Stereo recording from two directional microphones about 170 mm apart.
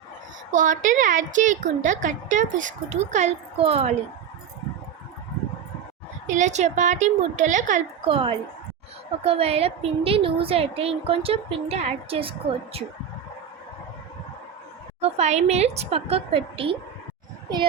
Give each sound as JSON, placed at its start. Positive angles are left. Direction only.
{"t": 0.5, "sound": "a woman's voice", "side_deg": -50}
{"t": 6.2, "sound": "a woman's voice", "side_deg": -45}
{"t": 8.0, "sound": "a woman's voice", "side_deg": -30}
{"t": 15.0, "sound": "a woman's voice", "side_deg": -40}